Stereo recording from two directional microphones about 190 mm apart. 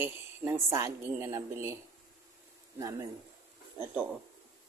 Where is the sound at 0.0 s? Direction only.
15° right (ahead or behind).